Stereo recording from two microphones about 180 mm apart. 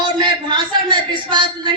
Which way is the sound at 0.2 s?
25° right (ahead or behind).